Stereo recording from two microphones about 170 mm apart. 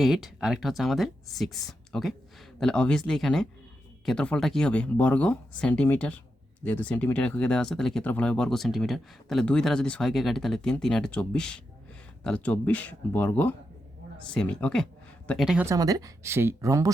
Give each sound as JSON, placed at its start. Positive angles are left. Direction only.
{"t": 0.0, "sound": "speech", "side_deg": 0}
{"t": 15.6, "sound": "speech", "side_deg": -20}